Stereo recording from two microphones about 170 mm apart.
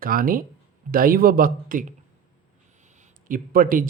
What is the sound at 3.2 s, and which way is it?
Speech, 55° right (ahead or behind).